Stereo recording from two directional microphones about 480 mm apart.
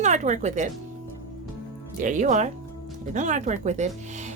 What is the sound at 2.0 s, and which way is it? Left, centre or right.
Speech, centre.